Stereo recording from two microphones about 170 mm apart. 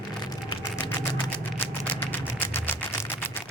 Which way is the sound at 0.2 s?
25° left (ahead or behind).